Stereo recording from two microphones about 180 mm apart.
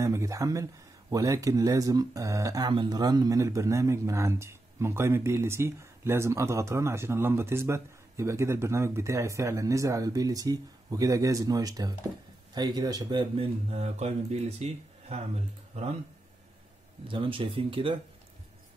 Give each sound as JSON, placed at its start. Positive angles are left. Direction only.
{"t": 0.0, "sound": "speech", "side_deg": -15}
{"t": 13.7, "sound": "speech", "side_deg": -35}
{"t": 17.1, "sound": "speech", "side_deg": -30}